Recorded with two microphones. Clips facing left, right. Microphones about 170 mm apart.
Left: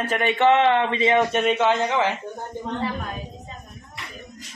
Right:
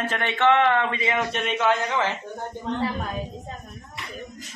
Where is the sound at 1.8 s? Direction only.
15° left (ahead or behind).